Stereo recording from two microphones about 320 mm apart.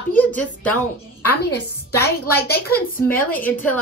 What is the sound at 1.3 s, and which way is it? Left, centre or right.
A woman's voice, left.